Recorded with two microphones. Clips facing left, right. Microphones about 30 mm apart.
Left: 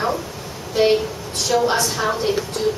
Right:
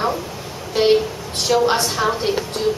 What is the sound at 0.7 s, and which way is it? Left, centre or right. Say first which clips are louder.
A woman's voice: right 1 dB; centre.